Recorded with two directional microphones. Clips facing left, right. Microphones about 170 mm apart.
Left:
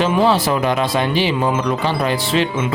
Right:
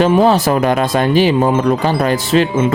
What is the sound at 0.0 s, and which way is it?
Speech, 45° right (ahead or behind).